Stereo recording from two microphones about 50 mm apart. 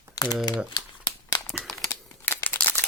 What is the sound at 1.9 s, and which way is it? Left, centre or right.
Crumpling, left.